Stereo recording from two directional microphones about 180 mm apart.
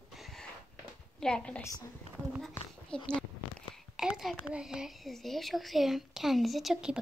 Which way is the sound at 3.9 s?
Centre (ahead or behind).